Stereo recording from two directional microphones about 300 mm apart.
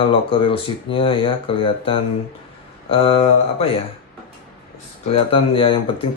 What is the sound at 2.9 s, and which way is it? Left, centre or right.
Mantra, centre.